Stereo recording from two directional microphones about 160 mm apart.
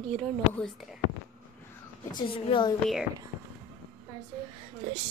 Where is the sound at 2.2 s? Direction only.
30° left (ahead or behind).